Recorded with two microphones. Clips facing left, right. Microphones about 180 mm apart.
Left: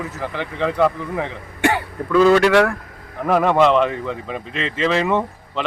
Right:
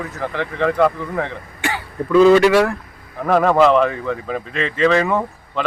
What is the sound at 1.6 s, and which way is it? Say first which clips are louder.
Throat clearing: left 6 dB; 60° left (ahead or behind).